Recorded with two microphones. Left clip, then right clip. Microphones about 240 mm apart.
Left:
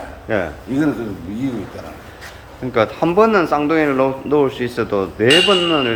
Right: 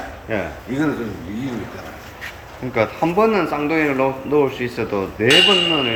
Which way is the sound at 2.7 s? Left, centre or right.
Centre.